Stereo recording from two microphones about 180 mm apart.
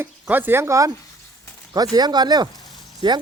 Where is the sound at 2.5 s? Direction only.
20° left (ahead or behind).